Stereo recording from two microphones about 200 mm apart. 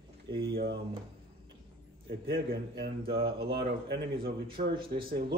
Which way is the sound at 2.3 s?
55° right (ahead or behind).